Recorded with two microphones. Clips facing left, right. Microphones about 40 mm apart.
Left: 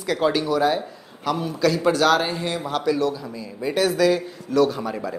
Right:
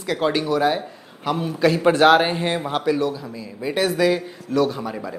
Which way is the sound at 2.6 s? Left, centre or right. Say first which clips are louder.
Right 1 dB; right.